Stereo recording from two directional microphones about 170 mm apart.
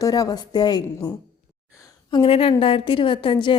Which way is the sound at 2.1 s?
35° left (ahead or behind).